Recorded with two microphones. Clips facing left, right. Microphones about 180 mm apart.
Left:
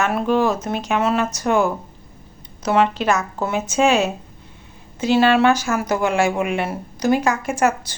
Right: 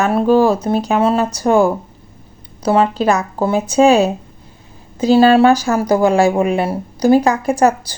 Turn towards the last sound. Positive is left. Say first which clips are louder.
# right 6 dB
turn(degrees=-35)  # may be behind; listen again after turning